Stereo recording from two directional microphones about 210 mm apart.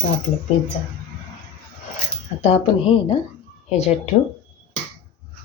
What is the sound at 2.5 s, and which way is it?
Speech, 25° left (ahead or behind).